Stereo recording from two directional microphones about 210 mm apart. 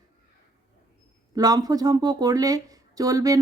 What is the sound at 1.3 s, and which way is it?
Speech, 20° right (ahead or behind).